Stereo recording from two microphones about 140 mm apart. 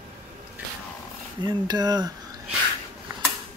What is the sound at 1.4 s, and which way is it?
Speech, 30° right (ahead or behind).